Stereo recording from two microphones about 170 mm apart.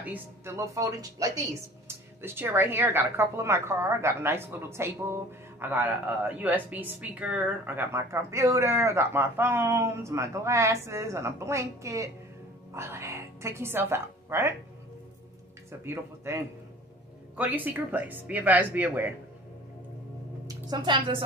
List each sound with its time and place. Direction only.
0.0 s a woman's voice: 15° right (ahead or behind)
15.8 s speech: 15° right (ahead or behind)
20.4 s a woman's voice: 25° right (ahead or behind)